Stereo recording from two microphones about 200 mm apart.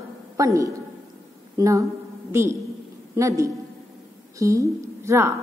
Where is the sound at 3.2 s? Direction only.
15° right (ahead or behind).